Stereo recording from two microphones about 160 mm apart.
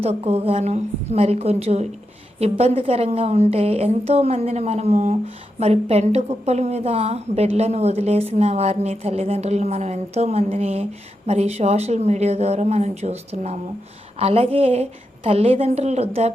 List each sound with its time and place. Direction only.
0.0 s a woman's voice: 40° right (ahead or behind)